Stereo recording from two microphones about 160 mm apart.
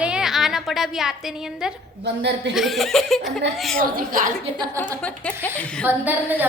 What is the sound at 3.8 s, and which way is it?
Speech, 60° right (ahead or behind).